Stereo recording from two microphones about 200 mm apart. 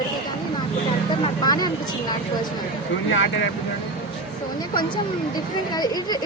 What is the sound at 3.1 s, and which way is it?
Speech, 70° left (ahead or behind).